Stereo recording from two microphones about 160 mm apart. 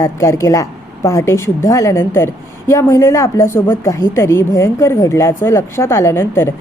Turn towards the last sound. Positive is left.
turn(degrees=15)  # may be behind; listen again after turning